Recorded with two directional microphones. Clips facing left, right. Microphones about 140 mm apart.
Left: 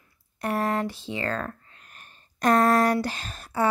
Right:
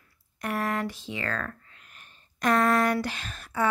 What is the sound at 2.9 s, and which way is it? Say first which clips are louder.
Speech: left 2 dB; 35° left (ahead or behind).